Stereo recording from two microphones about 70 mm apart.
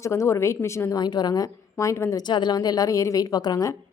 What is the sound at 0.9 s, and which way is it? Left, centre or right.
A woman's voice, left.